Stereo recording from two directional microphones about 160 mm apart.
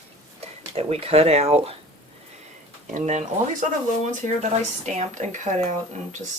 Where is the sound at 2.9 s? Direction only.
45° right (ahead or behind).